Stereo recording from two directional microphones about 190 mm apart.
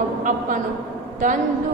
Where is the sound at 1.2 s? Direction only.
45° right (ahead or behind).